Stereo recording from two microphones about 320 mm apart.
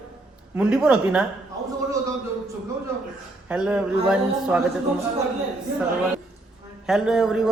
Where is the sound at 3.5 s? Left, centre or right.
Centre.